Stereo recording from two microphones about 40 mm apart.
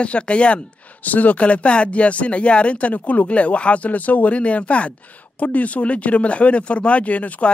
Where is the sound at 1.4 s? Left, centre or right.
Left.